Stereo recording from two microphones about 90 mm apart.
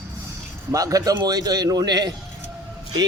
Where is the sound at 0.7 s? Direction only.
40° right (ahead or behind).